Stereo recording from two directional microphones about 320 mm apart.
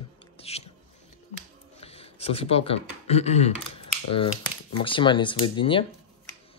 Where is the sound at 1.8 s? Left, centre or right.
Centre.